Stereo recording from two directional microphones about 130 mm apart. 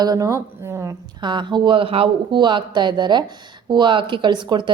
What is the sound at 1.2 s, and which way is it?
Speech, 35° right (ahead or behind).